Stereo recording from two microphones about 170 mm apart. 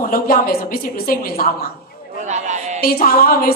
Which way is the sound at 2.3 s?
45° right (ahead or behind).